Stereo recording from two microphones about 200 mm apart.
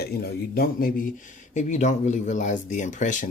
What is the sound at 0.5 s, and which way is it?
Speech, 50° left (ahead or behind).